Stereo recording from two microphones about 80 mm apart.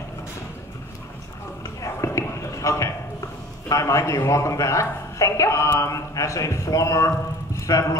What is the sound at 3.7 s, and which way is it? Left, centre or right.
A man's voice, left.